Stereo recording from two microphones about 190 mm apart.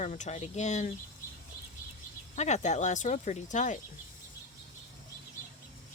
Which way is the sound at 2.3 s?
40° left (ahead or behind).